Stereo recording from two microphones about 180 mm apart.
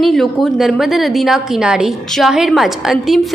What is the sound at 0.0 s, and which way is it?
A woman's voice, centre (ahead or behind).